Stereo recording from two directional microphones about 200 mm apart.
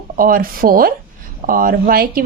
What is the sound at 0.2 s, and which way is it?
Speech, 45° right (ahead or behind).